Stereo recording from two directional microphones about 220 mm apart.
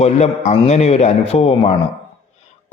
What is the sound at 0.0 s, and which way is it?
A man's voice, 30° left (ahead or behind).